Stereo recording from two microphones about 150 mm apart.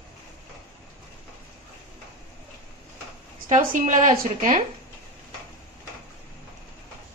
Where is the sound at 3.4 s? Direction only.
55° right (ahead or behind).